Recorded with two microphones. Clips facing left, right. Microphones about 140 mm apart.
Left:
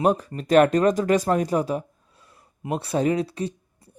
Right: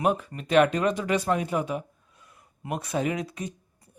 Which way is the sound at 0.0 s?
35° left (ahead or behind).